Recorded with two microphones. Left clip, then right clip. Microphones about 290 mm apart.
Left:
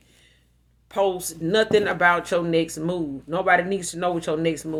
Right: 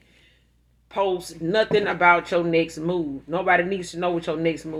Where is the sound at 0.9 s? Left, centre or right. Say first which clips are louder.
Left 1 dB; left.